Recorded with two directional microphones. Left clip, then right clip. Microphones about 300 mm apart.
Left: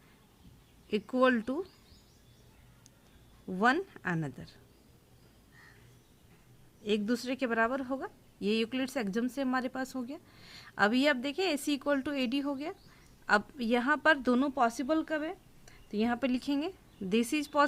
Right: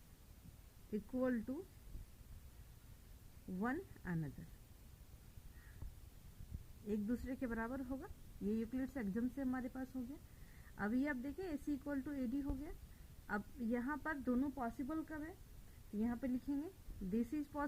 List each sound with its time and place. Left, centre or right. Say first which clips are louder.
0.9 s a woman's voice: left 14 dB; left
3.6 s a woman's voice: left 16 dB; left
6.8 s a woman's voice: left 12 dB; left